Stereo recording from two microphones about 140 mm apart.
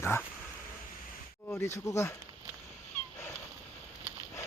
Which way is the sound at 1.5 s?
20° left (ahead or behind).